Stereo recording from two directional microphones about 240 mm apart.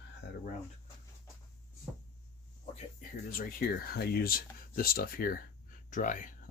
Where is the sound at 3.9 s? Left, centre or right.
Left.